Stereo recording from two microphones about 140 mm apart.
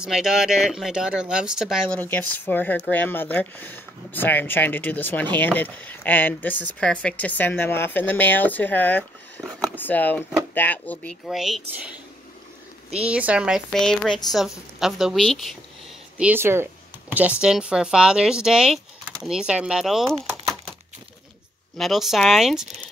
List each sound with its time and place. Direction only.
0.0 s speech: 5° right (ahead or behind)
1.9 s speech: 10° left (ahead or behind)
9.4 s speech: centre (ahead or behind)
9.8 s speech: 10° left (ahead or behind)
11.2 s speech: 5° right (ahead or behind)
13.7 s speech: 5° left (ahead or behind)
16.2 s speech: 15° right (ahead or behind)
21.7 s speech: centre (ahead or behind)